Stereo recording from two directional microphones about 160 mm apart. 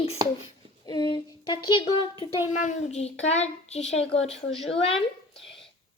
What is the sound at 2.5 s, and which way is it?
A child's voice, 45° left (ahead or behind).